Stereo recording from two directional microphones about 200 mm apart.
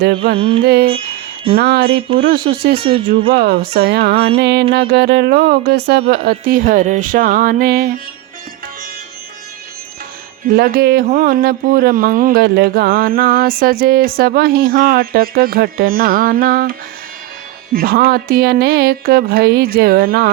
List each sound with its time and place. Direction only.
0.3 s music: 30° right (ahead or behind)
0.6 s speech: 55° right (ahead or behind)
4.4 s music: 55° right (ahead or behind)
4.7 s speech: 55° right (ahead or behind)
10.4 s speech: 50° right (ahead or behind)
17.7 s speech: 50° right (ahead or behind)